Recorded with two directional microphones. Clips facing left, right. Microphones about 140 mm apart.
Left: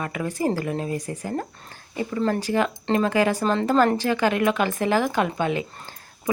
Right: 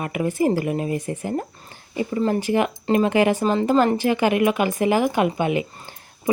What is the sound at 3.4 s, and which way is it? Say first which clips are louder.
Speech: right 2 dB; 5° right (ahead or behind).